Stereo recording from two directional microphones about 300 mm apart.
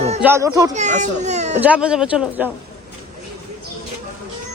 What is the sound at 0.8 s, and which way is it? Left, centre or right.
Speech, right.